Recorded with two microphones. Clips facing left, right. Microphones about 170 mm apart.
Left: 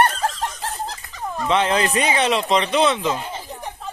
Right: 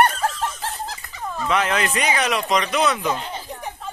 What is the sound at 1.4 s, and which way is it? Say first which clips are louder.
Speech: left 3 dB; 30° left (ahead or behind).